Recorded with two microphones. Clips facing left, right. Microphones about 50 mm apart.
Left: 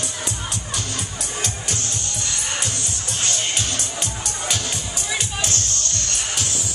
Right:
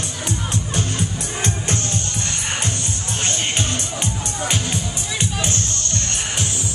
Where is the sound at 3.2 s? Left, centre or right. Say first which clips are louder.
Right 2 dB; right.